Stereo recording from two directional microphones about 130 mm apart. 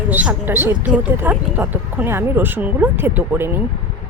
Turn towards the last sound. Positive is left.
turn(degrees=-15)  # may be behind; listen again after turning